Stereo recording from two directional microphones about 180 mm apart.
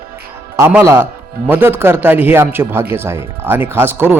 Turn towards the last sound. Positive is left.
turn(degrees=-10)  # may be behind; listen again after turning